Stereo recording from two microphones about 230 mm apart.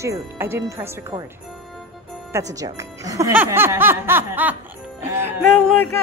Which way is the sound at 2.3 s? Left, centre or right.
Centre.